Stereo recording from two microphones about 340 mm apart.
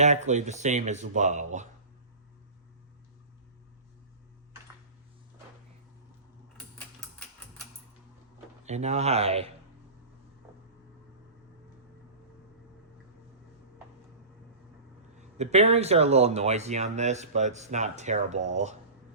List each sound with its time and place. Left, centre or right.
0.0 s speech: right
8.6 s speech: centre
15.2 s speech: centre